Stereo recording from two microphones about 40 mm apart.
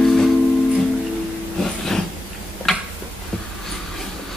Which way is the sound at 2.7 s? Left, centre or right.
Centre.